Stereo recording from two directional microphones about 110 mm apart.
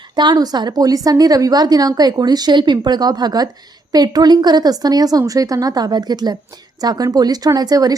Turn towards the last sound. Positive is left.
turn(degrees=-35)  # may be behind; listen again after turning